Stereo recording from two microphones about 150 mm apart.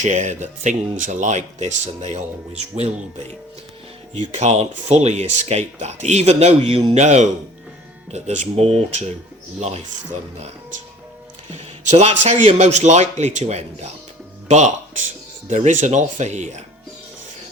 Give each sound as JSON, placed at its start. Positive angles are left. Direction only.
{"t": 0.0, "sound": "speech", "side_deg": -50}
{"t": 4.3, "sound": "speech", "side_deg": -50}
{"t": 11.5, "sound": "speech", "side_deg": -45}